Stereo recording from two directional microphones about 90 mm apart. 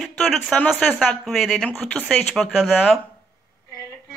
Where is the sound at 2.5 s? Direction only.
5° right (ahead or behind).